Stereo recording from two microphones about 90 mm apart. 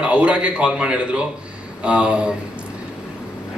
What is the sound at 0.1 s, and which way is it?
A man's voice, 10° right (ahead or behind).